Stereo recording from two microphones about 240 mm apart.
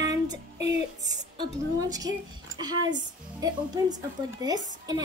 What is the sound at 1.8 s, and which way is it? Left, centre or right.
A woman's voice, centre.